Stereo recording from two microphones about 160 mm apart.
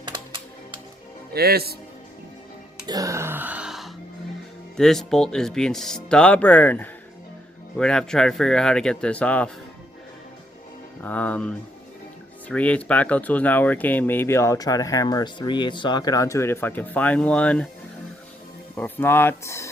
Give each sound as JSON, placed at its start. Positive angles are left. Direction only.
{"t": 1.3, "sound": "speech", "side_deg": -75}
{"t": 2.8, "sound": "music", "side_deg": -20}
{"t": 4.8, "sound": "speech", "side_deg": 5}
{"t": 11.0, "sound": "speech", "side_deg": 10}
{"t": 18.8, "sound": "speech", "side_deg": 15}